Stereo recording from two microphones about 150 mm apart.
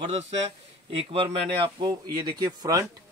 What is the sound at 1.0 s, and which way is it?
Speech, 40° right (ahead or behind).